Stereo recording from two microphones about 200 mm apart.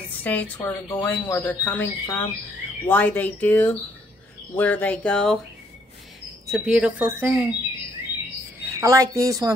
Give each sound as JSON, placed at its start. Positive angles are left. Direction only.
{"t": 0.2, "sound": "speech", "side_deg": 10}
{"t": 6.5, "sound": "speech", "side_deg": -5}
{"t": 8.7, "sound": "speech", "side_deg": -15}